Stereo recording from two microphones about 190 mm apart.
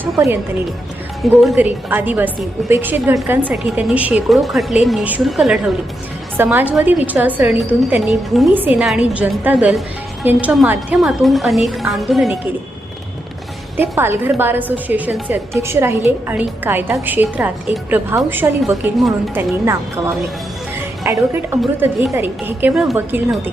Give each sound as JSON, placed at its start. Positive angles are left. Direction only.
{"t": 0.0, "sound": "a woman's voice", "side_deg": -10}
{"t": 13.7, "sound": "a woman's voice", "side_deg": -10}
{"t": 21.0, "sound": "a woman's voice", "side_deg": -15}